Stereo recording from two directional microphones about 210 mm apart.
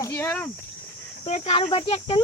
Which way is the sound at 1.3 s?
30° left (ahead or behind).